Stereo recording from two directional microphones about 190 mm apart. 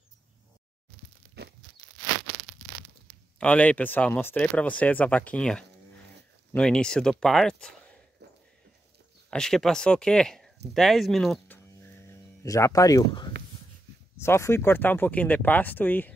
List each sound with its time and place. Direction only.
3.3 s speech: 10° left (ahead or behind)
8.2 s a sound: 60° right (ahead or behind)
9.3 s speech: 5° left (ahead or behind)